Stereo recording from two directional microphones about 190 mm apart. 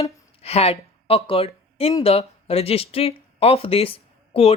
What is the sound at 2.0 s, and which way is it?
Speech, 30° left (ahead or behind).